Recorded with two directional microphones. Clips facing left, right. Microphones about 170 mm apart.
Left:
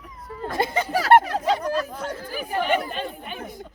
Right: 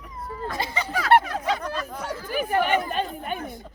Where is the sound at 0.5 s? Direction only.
50° left (ahead or behind).